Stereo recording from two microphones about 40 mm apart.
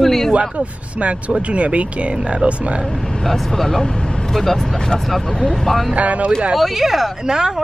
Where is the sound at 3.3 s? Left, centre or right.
Centre.